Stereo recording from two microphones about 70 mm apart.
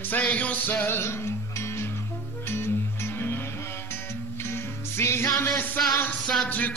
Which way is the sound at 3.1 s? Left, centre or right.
Left.